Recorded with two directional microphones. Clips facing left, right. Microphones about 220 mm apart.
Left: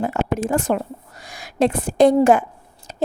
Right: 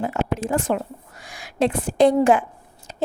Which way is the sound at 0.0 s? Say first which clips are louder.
Left 2 dB; 50° left (ahead or behind).